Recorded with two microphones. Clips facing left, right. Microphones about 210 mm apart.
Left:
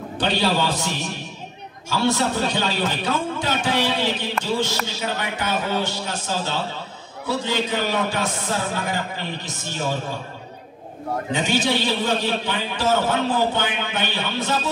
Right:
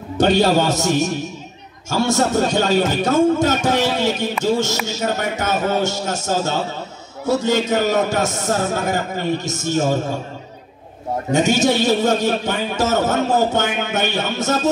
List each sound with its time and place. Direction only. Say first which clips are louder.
0.2 s a man's voice: right 7 dB; 45° right (ahead or behind)
11.3 s a man's voice: right 7 dB; 45° right (ahead or behind)